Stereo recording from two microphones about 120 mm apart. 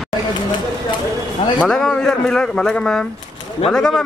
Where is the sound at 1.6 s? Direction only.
5° left (ahead or behind).